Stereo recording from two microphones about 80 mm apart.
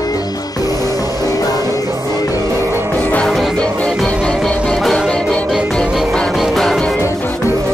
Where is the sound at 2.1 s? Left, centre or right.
Left.